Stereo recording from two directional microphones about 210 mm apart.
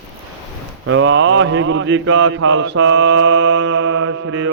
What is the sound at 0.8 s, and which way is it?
Mantra, 65° right (ahead or behind).